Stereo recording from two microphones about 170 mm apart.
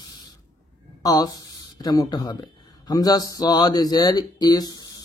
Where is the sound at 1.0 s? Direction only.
20° left (ahead or behind).